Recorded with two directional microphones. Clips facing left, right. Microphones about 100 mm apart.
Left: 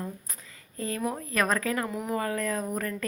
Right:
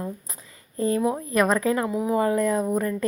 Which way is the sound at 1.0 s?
20° right (ahead or behind).